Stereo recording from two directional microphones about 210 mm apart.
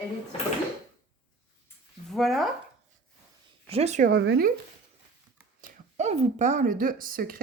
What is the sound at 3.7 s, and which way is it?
Speech, 30° right (ahead or behind).